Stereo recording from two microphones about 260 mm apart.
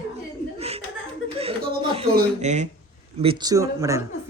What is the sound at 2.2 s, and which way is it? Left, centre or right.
Speech, right.